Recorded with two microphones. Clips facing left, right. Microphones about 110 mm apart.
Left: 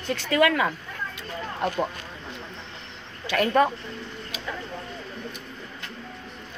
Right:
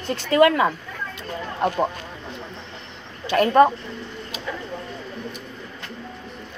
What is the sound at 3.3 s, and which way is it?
Speech, 35° right (ahead or behind).